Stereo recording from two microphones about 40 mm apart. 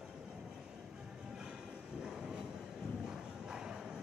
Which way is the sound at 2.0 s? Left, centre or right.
Centre.